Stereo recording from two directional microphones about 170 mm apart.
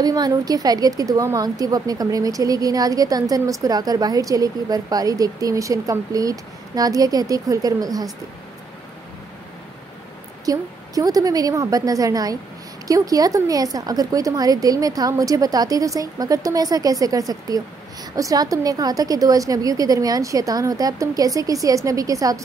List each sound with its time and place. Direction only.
0.0 s a woman's voice: 20° right (ahead or behind)
10.4 s a woman's voice: 20° right (ahead or behind)